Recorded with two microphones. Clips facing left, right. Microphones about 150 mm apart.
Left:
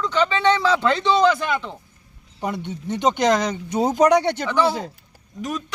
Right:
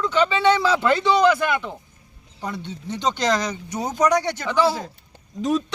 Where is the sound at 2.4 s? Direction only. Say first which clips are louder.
Left 4 dB; 20° left (ahead or behind).